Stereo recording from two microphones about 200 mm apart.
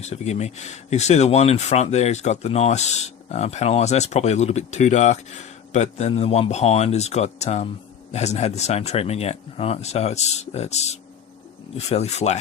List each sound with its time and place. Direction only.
0.0 s speech: 35° left (ahead or behind)